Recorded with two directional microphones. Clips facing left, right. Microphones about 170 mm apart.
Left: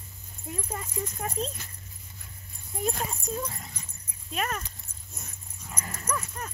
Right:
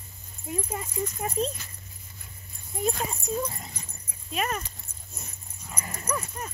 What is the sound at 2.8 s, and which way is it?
Speech, 5° right (ahead or behind).